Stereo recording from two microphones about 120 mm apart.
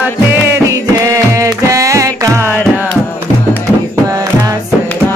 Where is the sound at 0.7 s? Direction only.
25° right (ahead or behind).